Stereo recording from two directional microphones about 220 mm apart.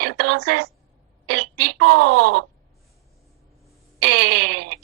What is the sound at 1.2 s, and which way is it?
Speech, 50° right (ahead or behind).